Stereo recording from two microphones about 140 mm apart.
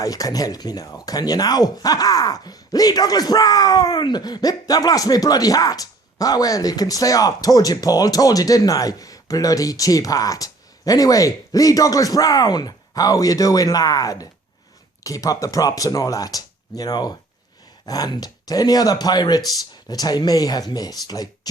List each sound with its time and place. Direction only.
0.0 s speech: 25° left (ahead or behind)